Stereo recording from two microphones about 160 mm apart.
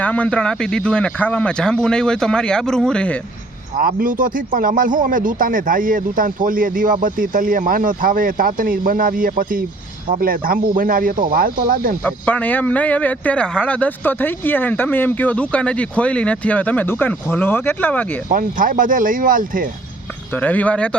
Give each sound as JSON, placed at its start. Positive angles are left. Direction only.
{"t": 0.0, "sound": "speech", "side_deg": 10}
{"t": 3.8, "sound": "speech", "side_deg": -65}
{"t": 12.0, "sound": "speech", "side_deg": 10}
{"t": 18.3, "sound": "speech", "side_deg": -55}
{"t": 20.3, "sound": "speech", "side_deg": 10}